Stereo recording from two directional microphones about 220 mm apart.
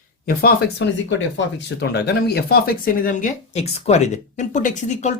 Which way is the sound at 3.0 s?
35° left (ahead or behind).